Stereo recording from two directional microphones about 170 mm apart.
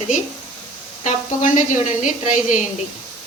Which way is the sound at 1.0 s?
50° left (ahead or behind).